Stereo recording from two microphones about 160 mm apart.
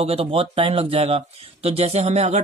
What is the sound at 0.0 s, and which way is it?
Speech, 35° right (ahead or behind).